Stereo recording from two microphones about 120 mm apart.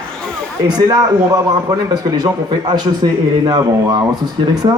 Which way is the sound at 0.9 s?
30° right (ahead or behind).